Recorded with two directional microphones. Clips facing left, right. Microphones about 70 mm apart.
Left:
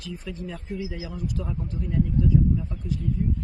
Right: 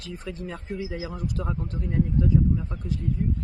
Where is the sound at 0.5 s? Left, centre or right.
Right.